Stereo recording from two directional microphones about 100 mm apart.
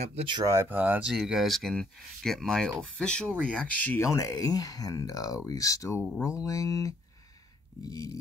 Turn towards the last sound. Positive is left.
turn(degrees=30)  # may be behind; listen again after turning